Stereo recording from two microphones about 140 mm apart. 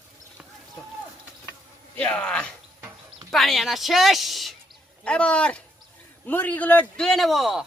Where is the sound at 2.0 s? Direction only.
10° left (ahead or behind).